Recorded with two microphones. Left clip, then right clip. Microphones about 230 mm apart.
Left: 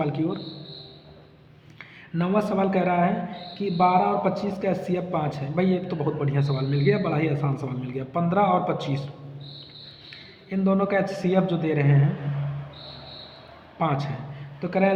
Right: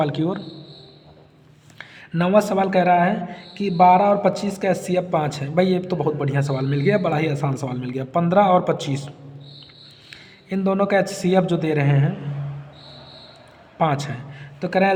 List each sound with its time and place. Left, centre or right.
0.0 s speech: right
1.8 s speech: right
10.5 s speech: right
13.7 s speech: right